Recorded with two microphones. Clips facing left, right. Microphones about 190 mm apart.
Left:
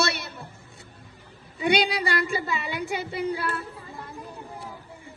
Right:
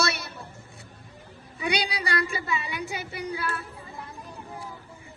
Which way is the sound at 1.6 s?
25° left (ahead or behind).